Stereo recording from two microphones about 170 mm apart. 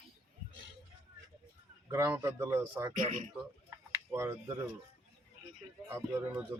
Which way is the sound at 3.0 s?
50° right (ahead or behind).